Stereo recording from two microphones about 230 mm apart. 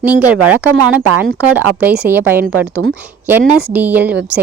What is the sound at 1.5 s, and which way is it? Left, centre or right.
Speech, centre.